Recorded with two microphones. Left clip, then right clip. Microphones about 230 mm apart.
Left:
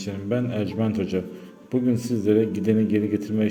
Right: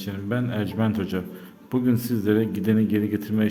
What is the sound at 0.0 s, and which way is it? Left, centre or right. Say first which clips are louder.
Speech: left 2 dB; centre.